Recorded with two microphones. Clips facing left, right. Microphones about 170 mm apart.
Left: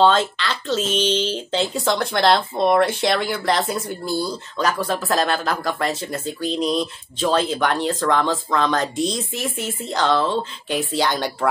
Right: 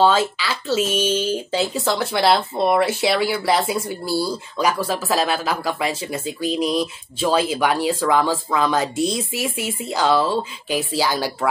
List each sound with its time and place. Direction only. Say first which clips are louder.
0.0 s speech: even; 5° right (ahead or behind)